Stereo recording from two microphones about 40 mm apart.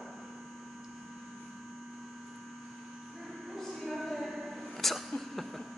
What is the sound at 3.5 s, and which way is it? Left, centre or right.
Music, centre.